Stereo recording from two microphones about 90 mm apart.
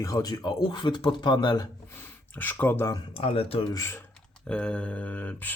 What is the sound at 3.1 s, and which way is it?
Speech, 90° left.